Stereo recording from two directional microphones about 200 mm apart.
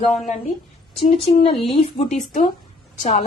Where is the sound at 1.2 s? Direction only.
30° left (ahead or behind).